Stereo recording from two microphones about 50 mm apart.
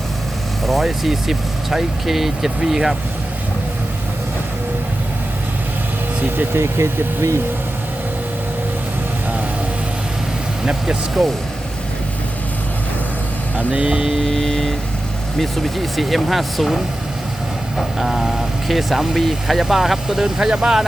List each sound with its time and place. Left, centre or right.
0.6 s speech: centre
6.3 s speech: right
11.2 s speech: centre
13.6 s speech: right; by 14.3 s centre
14.3 s speech: centre